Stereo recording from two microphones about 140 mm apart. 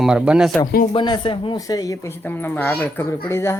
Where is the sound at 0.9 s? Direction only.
35° left (ahead or behind).